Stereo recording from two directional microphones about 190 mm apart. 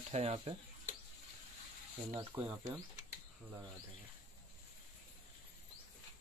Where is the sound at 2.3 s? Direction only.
20° right (ahead or behind).